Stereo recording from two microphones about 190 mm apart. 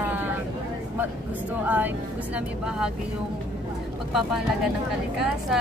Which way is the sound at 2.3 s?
5° right (ahead or behind).